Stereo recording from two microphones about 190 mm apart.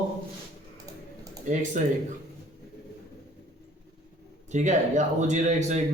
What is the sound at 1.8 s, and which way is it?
Speech, 40° right (ahead or behind).